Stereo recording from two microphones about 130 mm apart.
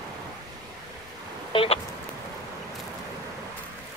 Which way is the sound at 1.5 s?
50° left (ahead or behind).